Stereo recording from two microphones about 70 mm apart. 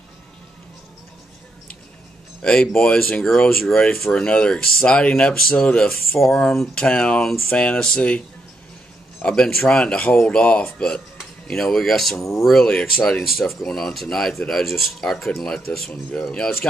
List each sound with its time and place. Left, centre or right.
2.4 s speech: centre
6.1 s speech: centre
9.2 s speech: centre
13.2 s speech: centre
15.9 s speech: centre